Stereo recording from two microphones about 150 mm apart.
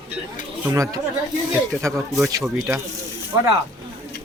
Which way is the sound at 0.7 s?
20° right (ahead or behind).